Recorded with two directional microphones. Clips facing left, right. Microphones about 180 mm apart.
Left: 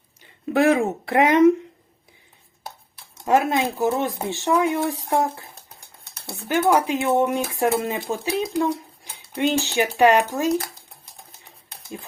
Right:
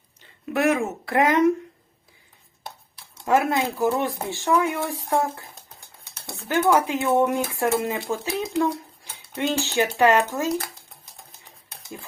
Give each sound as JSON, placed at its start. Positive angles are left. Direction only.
{"t": 0.5, "sound": "speech", "side_deg": 30}
{"t": 3.2, "sound": "speech", "side_deg": 20}
{"t": 6.6, "sound": "speech", "side_deg": 20}